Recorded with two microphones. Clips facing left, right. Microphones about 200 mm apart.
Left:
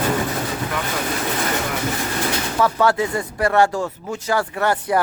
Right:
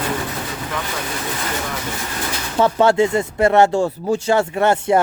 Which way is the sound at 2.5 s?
25° right (ahead or behind).